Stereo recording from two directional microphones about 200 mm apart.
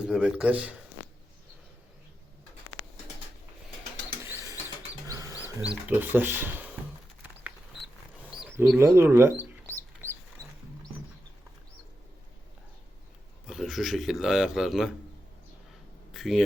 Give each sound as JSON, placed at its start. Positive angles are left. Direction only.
{"t": 0.0, "sound": "speech", "side_deg": -5}
{"t": 4.2, "sound": "mechanisms", "side_deg": -15}
{"t": 5.0, "sound": "wild animals", "side_deg": -15}
{"t": 5.5, "sound": "speech", "side_deg": -10}
{"t": 8.2, "sound": "wild animals", "side_deg": -5}
{"t": 9.0, "sound": "speech", "side_deg": -10}
{"t": 9.7, "sound": "bird", "side_deg": -15}
{"t": 13.5, "sound": "speech", "side_deg": 0}
{"t": 16.1, "sound": "a sound", "side_deg": 0}